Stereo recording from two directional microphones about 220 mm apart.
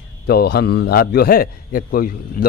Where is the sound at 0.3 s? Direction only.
45° left (ahead or behind).